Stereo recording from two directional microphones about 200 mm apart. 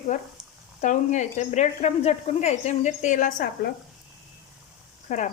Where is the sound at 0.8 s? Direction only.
40° left (ahead or behind).